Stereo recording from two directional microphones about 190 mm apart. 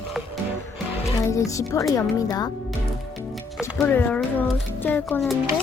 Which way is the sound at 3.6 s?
10° left (ahead or behind).